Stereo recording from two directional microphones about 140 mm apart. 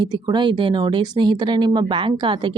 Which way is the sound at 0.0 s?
30° right (ahead or behind).